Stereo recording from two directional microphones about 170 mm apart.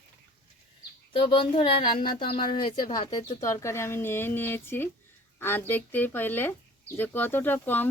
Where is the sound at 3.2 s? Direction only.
35° left (ahead or behind).